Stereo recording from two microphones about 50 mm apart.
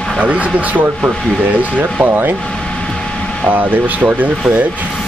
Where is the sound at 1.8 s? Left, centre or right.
Right.